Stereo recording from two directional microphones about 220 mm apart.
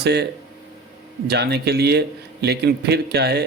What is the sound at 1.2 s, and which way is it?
A man's voice, 50° right (ahead or behind).